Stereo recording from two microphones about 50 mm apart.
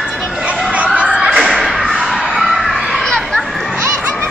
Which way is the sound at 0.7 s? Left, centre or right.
Right.